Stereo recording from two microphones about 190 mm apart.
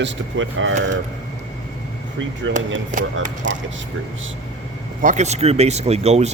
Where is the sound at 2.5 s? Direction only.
90° right.